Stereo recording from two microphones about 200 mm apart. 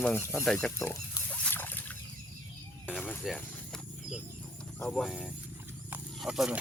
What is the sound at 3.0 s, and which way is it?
Snake, 5° left (ahead or behind).